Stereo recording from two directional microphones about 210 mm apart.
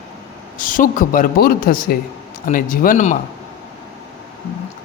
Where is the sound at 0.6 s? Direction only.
40° left (ahead or behind).